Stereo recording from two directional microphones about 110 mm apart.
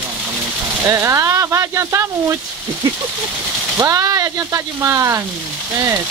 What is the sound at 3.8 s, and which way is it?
Speech, 30° right (ahead or behind).